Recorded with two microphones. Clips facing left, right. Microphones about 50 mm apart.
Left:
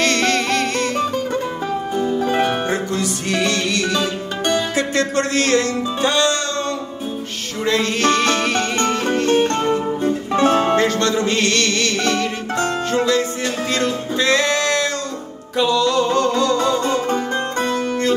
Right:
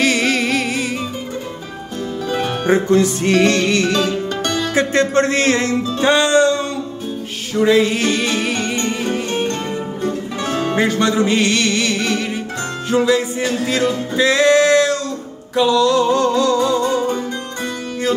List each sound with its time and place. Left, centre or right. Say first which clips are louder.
0.0 s music: right 1 dB; centre
2.6 s music: right 7 dB; right
3.9 s music: right 3 dB; centre
4.7 s music: right 4 dB; right; by 9.4 s centre
10.3 s music: left 10 dB; left
10.8 s music: right 2 dB; centre